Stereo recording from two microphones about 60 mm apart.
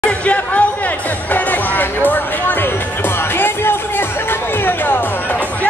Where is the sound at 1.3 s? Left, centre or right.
Left.